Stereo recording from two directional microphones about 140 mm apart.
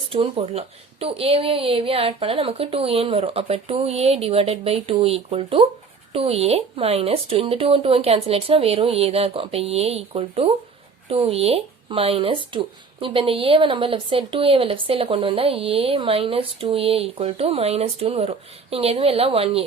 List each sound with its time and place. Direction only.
0.1 s speech: 40° right (ahead or behind)